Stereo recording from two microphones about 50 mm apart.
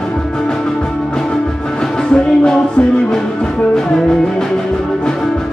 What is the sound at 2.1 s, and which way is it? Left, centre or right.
Music, centre.